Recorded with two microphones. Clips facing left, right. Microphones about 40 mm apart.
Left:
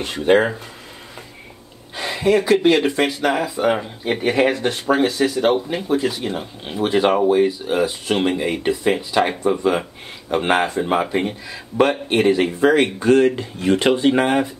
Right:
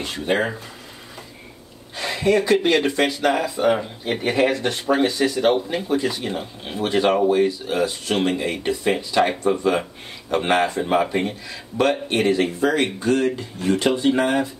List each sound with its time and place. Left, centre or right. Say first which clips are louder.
0.0 s speech: left 6 dB; left
2.0 s speech: left 2 dB; centre
10.3 s speech: left 1 dB; centre
12.5 s speech: left 5 dB; left